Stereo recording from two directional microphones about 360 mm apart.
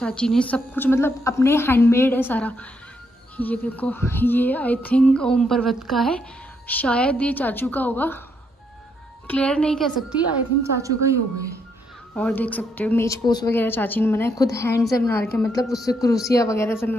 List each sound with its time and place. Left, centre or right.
0.0 s a woman's voice: centre
9.3 s a woman's voice: centre
12.2 s a woman's voice: centre